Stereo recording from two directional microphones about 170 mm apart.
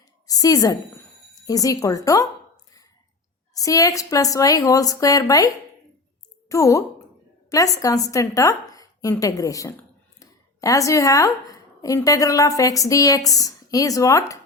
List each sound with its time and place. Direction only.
0.3 s speech: 20° left (ahead or behind)
3.5 s a woman's voice: 20° left (ahead or behind)
6.5 s a woman's voice: 20° left (ahead or behind)